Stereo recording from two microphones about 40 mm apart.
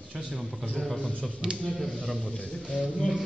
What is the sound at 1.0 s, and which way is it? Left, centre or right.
Speech, left.